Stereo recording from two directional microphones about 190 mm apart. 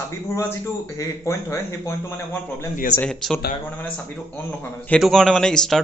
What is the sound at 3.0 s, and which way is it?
Speech, 5° left (ahead or behind).